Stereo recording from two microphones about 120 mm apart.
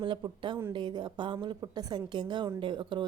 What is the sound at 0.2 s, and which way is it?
A woman's voice, 45° right (ahead or behind).